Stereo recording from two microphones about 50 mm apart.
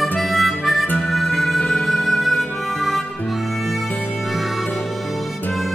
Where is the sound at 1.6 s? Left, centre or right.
Left.